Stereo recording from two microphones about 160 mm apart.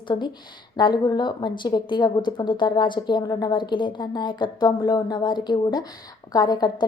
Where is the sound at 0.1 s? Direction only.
25° left (ahead or behind).